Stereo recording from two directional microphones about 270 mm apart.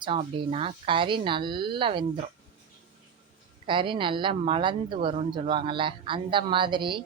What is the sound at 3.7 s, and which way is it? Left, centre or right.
A woman's voice, centre.